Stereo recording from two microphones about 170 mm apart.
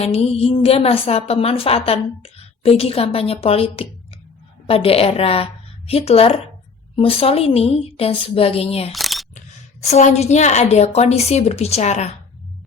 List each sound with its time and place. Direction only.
0.0 s a woman's voice: 35° left (ahead or behind)
8.9 s single-lens reflex camera: centre (ahead or behind)
9.8 s a woman's voice: 40° left (ahead or behind)